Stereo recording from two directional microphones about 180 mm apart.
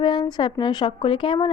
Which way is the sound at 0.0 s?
25° left (ahead or behind).